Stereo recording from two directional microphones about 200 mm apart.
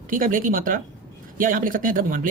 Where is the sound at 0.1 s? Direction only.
45° right (ahead or behind).